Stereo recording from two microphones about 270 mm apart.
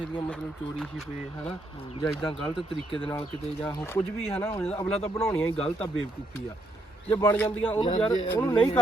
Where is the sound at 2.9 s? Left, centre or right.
Centre.